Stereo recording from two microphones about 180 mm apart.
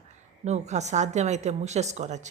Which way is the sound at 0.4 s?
40° right (ahead or behind).